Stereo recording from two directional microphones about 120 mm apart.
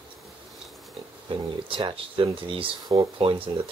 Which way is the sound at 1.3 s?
45° right (ahead or behind).